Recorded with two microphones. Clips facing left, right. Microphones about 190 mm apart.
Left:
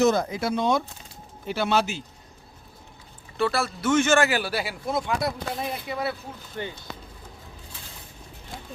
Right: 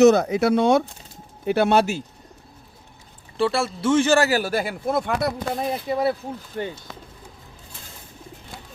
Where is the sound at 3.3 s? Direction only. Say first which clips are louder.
Right 3 dB; 25° right (ahead or behind); by 5.6 s 55° right (ahead or behind).